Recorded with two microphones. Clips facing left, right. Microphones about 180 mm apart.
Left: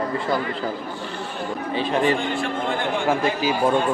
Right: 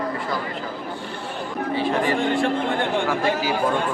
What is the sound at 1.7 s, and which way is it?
A man's voice, 20° left (ahead or behind).